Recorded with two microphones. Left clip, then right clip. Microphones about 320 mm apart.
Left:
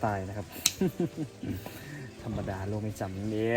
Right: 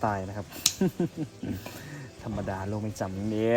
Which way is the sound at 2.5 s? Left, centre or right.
Right.